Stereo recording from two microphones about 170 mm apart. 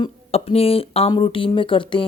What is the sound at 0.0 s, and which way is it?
Speech, 35° left (ahead or behind).